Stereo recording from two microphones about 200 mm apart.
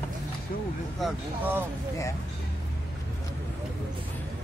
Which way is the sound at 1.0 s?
10° right (ahead or behind).